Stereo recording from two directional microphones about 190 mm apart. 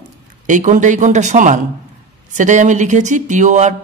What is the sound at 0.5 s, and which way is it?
Speech, 40° right (ahead or behind).